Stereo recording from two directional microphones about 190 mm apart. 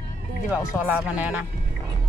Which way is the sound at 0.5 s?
10° right (ahead or behind).